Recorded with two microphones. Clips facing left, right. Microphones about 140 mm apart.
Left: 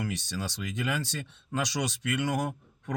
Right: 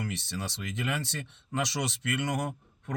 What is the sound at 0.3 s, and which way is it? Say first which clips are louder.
Speech: left 2 dB; 25° right (ahead or behind).